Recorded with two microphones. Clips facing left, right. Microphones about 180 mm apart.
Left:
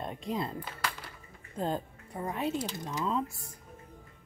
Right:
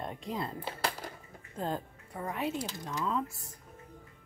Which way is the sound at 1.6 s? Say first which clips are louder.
Left 2 dB; 20° left (ahead or behind).